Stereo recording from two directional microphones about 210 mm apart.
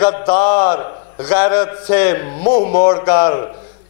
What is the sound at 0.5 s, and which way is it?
Speech, 25° left (ahead or behind).